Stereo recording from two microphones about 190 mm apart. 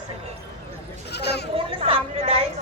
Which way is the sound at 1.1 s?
60° left (ahead or behind).